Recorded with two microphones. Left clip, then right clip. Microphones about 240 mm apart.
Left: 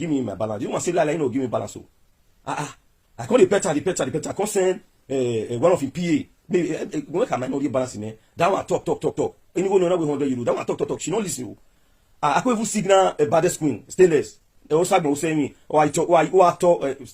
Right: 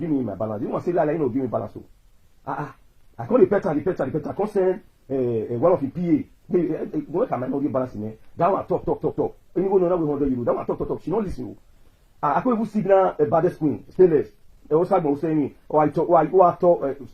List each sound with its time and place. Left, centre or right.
0.1 s speech: left
2.4 s a sound: left
3.2 s speech: left
15.0 s speech: left